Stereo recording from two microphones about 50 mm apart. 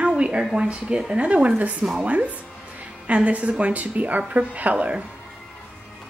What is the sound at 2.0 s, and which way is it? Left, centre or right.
A woman's voice, right.